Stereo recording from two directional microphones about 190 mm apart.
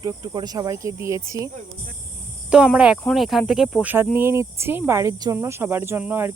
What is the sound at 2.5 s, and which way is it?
Speech, 5° right (ahead or behind).